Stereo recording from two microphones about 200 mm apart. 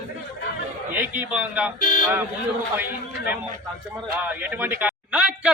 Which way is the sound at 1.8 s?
40° left (ahead or behind).